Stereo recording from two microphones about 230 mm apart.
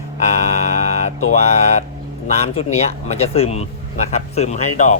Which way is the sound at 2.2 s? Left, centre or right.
Left.